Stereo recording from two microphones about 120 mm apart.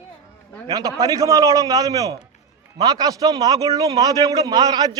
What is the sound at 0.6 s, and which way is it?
A man's voice, 30° right (ahead or behind).